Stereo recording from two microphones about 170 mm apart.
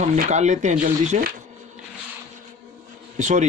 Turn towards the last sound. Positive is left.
turn(degrees=-45)  # may be behind; listen again after turning